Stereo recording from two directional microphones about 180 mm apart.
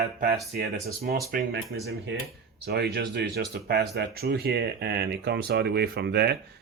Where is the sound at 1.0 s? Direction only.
60° right (ahead or behind).